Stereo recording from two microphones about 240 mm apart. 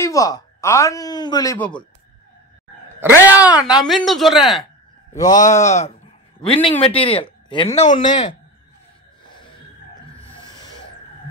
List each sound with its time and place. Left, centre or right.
0.0 s speech: centre
3.3 s speech: centre
5.1 s speech: left
10.2 s a sound: centre